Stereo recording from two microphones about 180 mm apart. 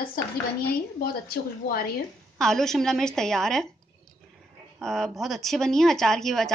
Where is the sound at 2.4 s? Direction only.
Centre (ahead or behind).